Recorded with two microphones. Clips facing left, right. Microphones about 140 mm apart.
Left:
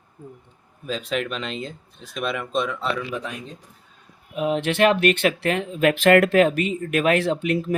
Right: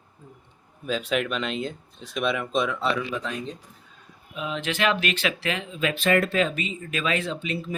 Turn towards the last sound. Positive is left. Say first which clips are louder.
# left 8 dB
turn(degrees=65)  # may be behind; listen again after turning